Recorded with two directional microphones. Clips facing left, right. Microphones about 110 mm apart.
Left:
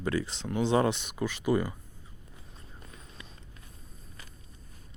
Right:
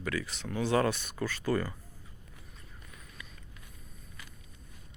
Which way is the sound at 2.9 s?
30° left (ahead or behind).